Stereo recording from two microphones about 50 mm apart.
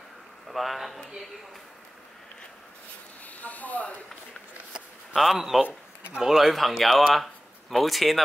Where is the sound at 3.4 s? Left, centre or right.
Left.